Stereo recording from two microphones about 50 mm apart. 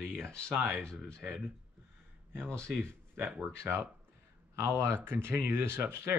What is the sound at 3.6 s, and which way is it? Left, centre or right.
Speech, right.